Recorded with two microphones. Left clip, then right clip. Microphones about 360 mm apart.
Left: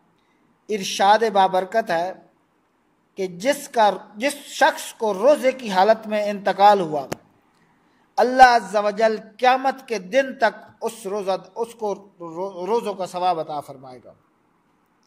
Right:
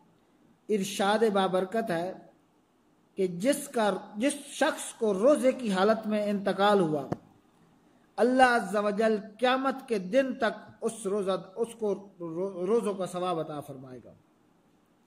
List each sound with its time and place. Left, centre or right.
0.8 s speech: left
3.3 s speech: left
8.2 s speech: left